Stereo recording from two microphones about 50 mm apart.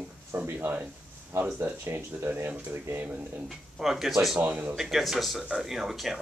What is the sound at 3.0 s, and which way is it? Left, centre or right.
Speech, right.